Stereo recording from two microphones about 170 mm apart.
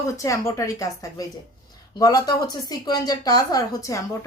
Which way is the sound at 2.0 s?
20° left (ahead or behind).